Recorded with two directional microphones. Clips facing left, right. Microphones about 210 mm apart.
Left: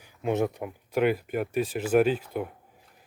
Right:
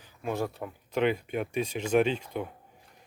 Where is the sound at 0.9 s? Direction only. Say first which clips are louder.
Left 2 dB; 5° left (ahead or behind).